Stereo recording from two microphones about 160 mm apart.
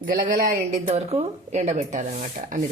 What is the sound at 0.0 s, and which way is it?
Speech, 60° right (ahead or behind).